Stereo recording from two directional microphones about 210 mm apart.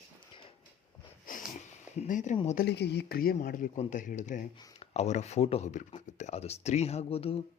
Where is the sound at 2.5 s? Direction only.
55° left (ahead or behind).